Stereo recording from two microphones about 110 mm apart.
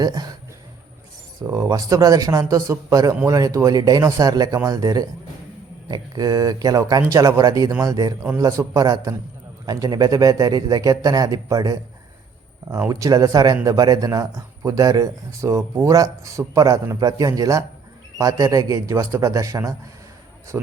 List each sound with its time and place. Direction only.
0.0 s speech: 35° right (ahead or behind)
1.5 s speech: 30° right (ahead or behind)
12.9 s speech: 30° right (ahead or behind)